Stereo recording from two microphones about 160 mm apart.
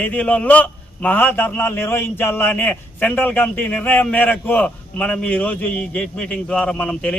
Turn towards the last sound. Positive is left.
turn(degrees=5)  # may be behind; listen again after turning